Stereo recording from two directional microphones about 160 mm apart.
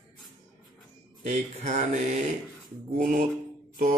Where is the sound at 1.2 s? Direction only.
50° right (ahead or behind).